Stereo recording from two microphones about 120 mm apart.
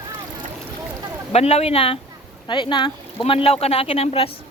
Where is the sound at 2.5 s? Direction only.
40° left (ahead or behind).